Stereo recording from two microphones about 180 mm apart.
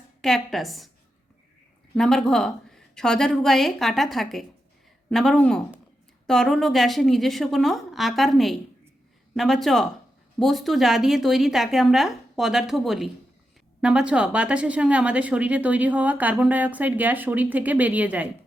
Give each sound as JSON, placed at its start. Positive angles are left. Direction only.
{"t": 0.2, "sound": "a woman's voice", "side_deg": 0}
{"t": 2.0, "sound": "a woman's voice", "side_deg": 5}